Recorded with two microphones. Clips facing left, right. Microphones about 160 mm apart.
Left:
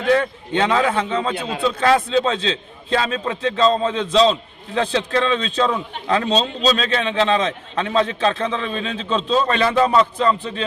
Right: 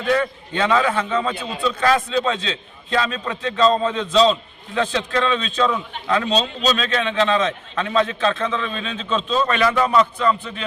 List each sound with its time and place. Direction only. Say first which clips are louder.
0.5 s a man's voice: left 1 dB; 25° left (ahead or behind)